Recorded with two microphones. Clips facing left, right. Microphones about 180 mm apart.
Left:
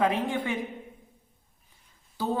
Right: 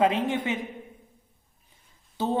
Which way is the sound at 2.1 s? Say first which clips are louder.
Right 2 dB; 25° right (ahead or behind).